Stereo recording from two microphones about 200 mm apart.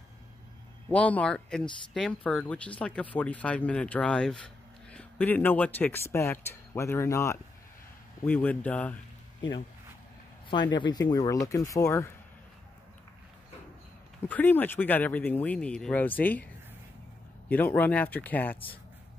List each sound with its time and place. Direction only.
0.8 s speech: 5° left (ahead or behind)
10.7 s speech: 20° left (ahead or behind)
14.2 s speech: 10° left (ahead or behind)
17.5 s speech: 10° left (ahead or behind)